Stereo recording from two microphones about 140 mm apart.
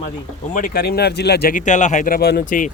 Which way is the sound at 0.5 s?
80° left.